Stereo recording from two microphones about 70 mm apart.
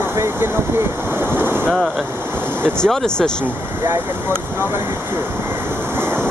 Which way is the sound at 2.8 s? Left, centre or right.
Centre.